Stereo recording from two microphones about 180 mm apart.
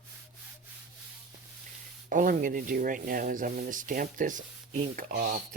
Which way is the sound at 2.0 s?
50° right (ahead or behind).